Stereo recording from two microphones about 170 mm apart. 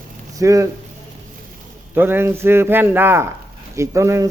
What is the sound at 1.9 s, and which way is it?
Speech, 10° right (ahead or behind).